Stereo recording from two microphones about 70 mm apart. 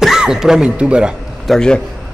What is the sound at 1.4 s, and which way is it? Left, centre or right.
Speech, centre.